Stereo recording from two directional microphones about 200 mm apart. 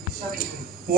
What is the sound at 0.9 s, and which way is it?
Speech, 45° right (ahead or behind).